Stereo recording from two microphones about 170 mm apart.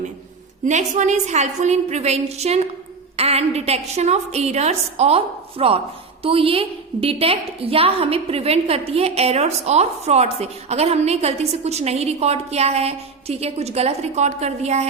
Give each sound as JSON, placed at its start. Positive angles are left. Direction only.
{"t": 0.6, "sound": "a woman's voice", "side_deg": -45}